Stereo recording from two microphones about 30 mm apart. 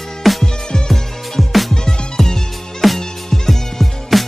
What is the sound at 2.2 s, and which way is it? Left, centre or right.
Music, centre.